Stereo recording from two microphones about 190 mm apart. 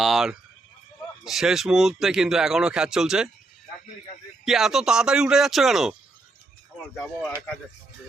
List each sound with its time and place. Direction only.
0.0 s speech: centre (ahead or behind)
4.4 s speech: centre (ahead or behind)